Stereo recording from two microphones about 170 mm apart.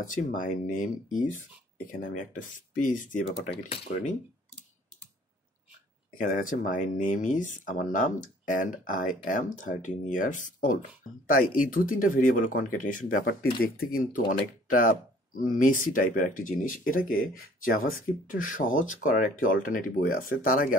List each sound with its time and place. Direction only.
0.0 s speech: 50° left (ahead or behind)
3.6 s speech: 35° left (ahead or behind)
6.1 s speech: 50° left (ahead or behind)
13.2 s speech: 65° left (ahead or behind)